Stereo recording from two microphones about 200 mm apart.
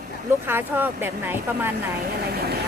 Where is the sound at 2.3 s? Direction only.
55° right (ahead or behind).